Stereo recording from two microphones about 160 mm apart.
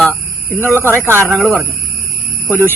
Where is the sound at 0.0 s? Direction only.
15° left (ahead or behind).